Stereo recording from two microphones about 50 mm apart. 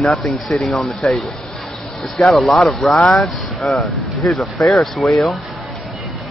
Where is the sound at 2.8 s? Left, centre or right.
Centre.